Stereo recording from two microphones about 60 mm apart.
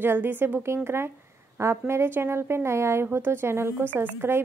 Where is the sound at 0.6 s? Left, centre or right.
Right.